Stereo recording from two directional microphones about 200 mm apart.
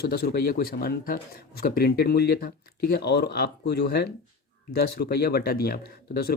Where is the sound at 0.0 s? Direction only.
50° left (ahead or behind).